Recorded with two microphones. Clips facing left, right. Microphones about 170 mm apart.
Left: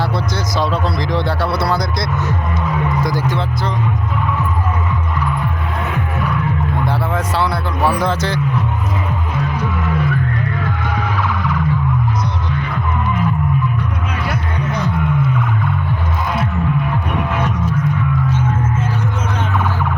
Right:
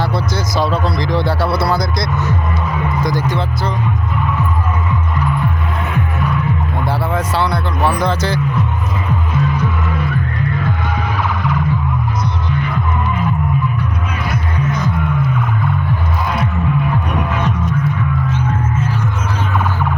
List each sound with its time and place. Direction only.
0.0 s speech: 5° right (ahead or behind)
6.8 s speech: centre (ahead or behind)